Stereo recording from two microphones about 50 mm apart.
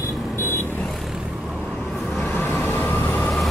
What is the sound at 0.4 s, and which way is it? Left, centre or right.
Vehicle, left.